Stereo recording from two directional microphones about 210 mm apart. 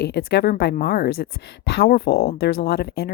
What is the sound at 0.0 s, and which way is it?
A woman's voice, 50° left (ahead or behind).